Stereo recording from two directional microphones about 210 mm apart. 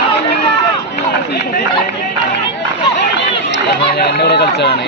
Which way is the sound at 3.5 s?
50° left (ahead or behind).